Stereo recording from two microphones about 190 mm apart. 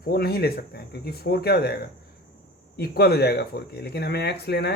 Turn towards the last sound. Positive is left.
turn(degrees=60)  # may be behind; listen again after turning